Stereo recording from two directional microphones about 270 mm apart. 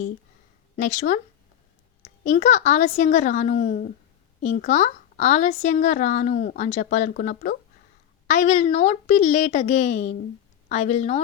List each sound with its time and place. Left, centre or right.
0.8 s a woman's voice: left
2.2 s a woman's voice: left